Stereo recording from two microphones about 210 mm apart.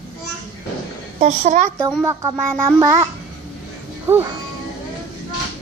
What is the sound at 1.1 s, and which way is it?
Speech, 35° right (ahead or behind).